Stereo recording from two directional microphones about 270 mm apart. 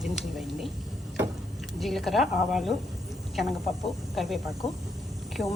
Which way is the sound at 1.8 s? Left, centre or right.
Centre.